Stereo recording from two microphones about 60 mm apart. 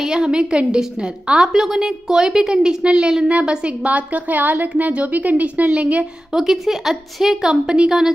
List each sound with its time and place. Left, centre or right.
0.0 s a woman's voice: centre
6.3 s a woman's voice: centre